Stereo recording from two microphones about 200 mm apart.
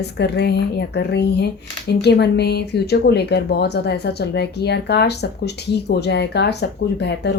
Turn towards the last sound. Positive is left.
turn(degrees=55)  # may be behind; listen again after turning